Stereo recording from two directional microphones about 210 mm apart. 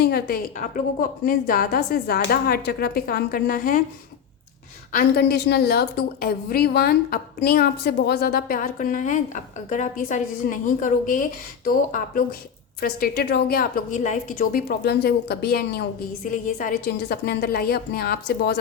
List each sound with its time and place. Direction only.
0.0 s a woman's voice: 45° left (ahead or behind)
4.9 s a woman's voice: 45° left (ahead or behind)
10.4 s a woman's voice: 50° left (ahead or behind)
10.8 s a woman's voice: 40° left (ahead or behind)